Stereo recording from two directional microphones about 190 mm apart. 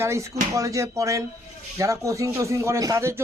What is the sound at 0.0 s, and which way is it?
Speech, 15° right (ahead or behind).